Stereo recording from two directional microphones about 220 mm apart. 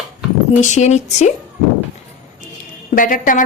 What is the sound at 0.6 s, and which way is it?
Speech, 30° left (ahead or behind).